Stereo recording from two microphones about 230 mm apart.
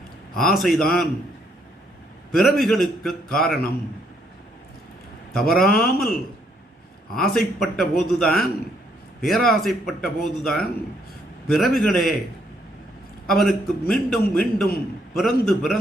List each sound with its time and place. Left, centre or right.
0.3 s speech: centre
2.3 s speech: centre
5.3 s speech: centre
5.8 s speech: left
7.1 s speech: centre
13.2 s speech: centre